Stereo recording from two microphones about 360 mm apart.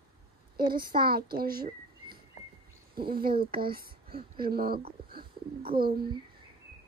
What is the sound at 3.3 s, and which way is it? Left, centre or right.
Speech, centre.